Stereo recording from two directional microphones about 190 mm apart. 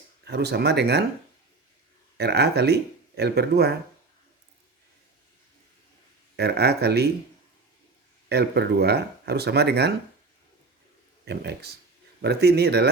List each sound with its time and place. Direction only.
0.3 s speech: 60° right (ahead or behind)
2.1 s speech: 60° right (ahead or behind)
6.3 s speech: 60° right (ahead or behind)
8.3 s speech: 60° right (ahead or behind)
11.3 s speech: 60° right (ahead or behind)